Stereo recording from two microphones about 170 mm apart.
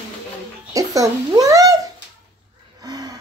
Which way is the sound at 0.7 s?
20° right (ahead or behind).